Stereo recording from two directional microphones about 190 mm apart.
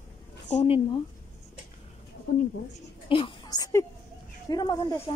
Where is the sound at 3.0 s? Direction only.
25° left (ahead or behind).